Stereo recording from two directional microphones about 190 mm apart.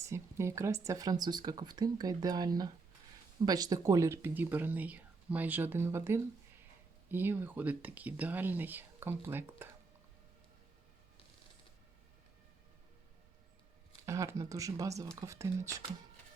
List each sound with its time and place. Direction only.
0.0 s speech: 15° right (ahead or behind)
14.0 s speech: 15° right (ahead or behind)